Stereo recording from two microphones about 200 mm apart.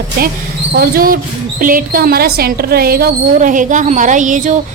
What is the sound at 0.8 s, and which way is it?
Speech, 45° right (ahead or behind).